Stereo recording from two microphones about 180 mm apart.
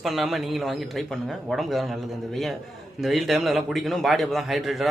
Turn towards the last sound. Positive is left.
turn(degrees=0)  # may be behind; listen again after turning